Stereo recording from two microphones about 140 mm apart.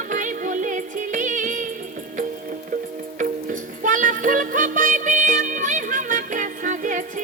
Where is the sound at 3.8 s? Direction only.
70° right (ahead or behind).